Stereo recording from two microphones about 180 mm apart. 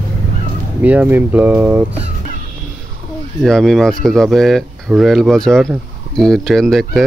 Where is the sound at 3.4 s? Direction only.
Centre (ahead or behind).